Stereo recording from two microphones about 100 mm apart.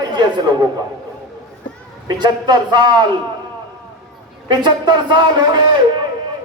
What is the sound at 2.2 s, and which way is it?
Speech, 45° right (ahead or behind).